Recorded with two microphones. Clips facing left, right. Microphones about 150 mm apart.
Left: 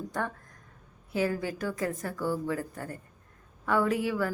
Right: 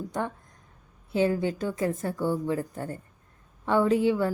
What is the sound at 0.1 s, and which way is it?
A woman's voice, 20° right (ahead or behind).